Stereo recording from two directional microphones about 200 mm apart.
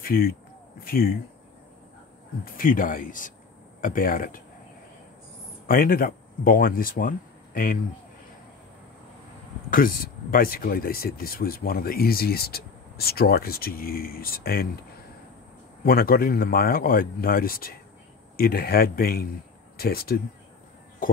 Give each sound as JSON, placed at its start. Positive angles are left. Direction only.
{"t": 0.0, "sound": "speech", "side_deg": 50}
{"t": 2.4, "sound": "speech", "side_deg": 45}
{"t": 5.7, "sound": "speech", "side_deg": 45}
{"t": 9.7, "sound": "speech", "side_deg": 45}
{"t": 15.8, "sound": "speech", "side_deg": 50}